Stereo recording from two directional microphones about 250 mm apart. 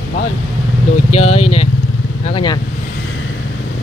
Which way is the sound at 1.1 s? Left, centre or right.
Left.